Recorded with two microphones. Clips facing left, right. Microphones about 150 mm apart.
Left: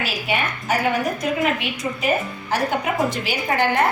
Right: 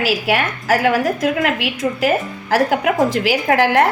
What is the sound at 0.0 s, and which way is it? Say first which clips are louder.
A woman's voice: right 6 dB; 90° right.